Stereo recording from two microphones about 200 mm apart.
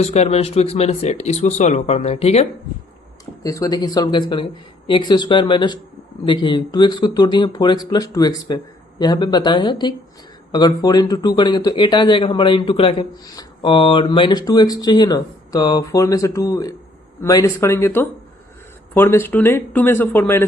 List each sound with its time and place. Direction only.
0.0 s speech: 35° left (ahead or behind)
3.4 s speech: 15° left (ahead or behind)